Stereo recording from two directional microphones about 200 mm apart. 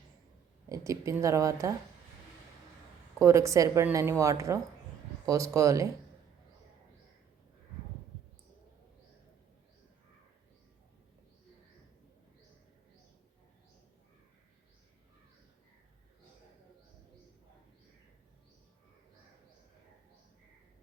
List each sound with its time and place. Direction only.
0.7 s a woman's voice: 15° right (ahead or behind)
3.2 s a woman's voice: 15° right (ahead or behind)